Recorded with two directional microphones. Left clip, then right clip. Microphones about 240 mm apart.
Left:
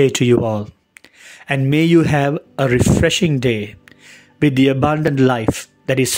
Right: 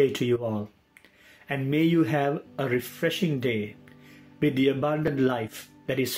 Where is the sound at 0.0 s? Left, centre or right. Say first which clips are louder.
Left 10 dB; left.